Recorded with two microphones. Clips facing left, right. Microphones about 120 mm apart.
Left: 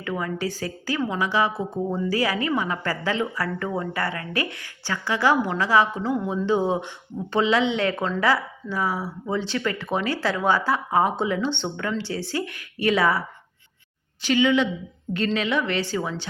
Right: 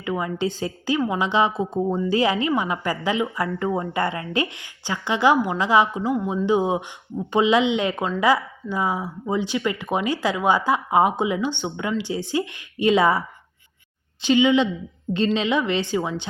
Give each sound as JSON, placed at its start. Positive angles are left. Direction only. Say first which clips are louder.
{"t": 0.0, "sound": "a woman's voice", "louder": "right 3 dB", "side_deg": -20}